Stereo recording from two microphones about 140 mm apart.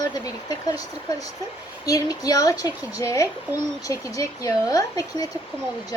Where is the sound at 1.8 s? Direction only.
25° left (ahead or behind).